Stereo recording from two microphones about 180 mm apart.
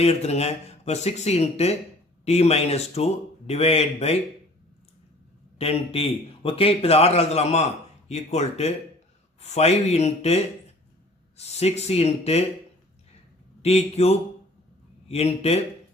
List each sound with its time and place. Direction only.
0.0 s speech: 35° left (ahead or behind)
5.5 s speech: 35° left (ahead or behind)
13.6 s speech: 35° left (ahead or behind)